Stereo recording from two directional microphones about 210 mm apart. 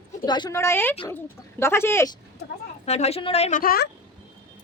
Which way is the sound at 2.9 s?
30° left (ahead or behind).